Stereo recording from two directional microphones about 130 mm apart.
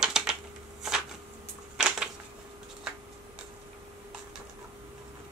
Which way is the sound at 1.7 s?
5° right (ahead or behind).